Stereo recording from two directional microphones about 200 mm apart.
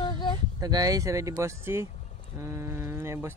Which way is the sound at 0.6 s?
20° right (ahead or behind).